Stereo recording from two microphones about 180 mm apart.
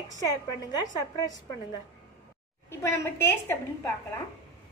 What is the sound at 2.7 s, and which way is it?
Speech, 15° left (ahead or behind).